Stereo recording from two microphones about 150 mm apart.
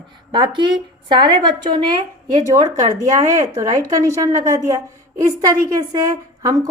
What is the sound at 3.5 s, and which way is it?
A woman's voice, 25° right (ahead or behind).